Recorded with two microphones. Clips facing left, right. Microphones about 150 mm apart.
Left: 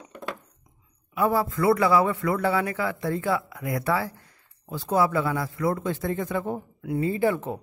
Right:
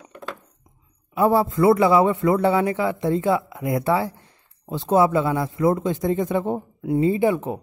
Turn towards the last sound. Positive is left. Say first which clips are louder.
# right 4 dB
turn(degrees=-15)  # may be behind; listen again after turning